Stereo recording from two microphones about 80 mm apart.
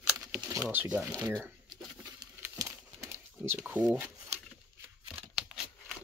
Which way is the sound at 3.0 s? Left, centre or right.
Right.